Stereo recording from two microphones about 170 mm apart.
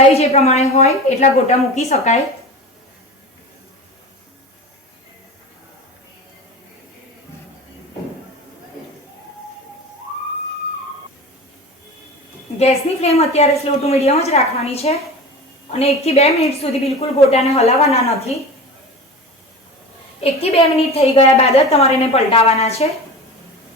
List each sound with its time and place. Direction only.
0.1 s a woman's voice: 40° left (ahead or behind)
12.5 s a woman's voice: 40° left (ahead or behind)
20.2 s a woman's voice: 35° left (ahead or behind)